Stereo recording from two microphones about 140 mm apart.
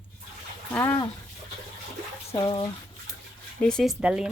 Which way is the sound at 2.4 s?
35° left (ahead or behind).